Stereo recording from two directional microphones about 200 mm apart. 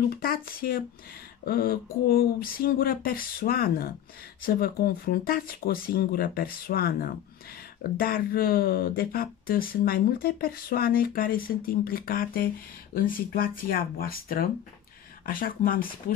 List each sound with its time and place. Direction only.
0.1 s speech: 45° left (ahead or behind)